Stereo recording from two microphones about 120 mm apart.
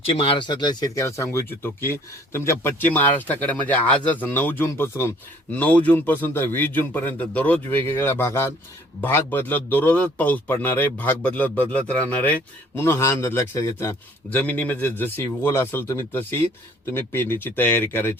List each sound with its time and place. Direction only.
0.1 s speech: 45° left (ahead or behind); by 18.1 s 20° left (ahead or behind)